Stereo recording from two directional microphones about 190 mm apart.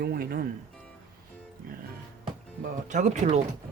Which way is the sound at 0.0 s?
55° right (ahead or behind).